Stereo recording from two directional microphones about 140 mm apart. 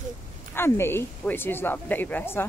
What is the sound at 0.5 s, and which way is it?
A woman's voice, 15° left (ahead or behind).